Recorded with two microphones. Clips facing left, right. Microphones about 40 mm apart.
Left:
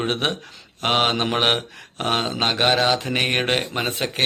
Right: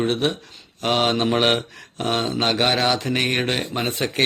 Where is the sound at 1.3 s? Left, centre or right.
Centre.